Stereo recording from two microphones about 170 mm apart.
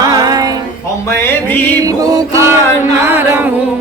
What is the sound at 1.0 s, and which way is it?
Music, 15° left (ahead or behind).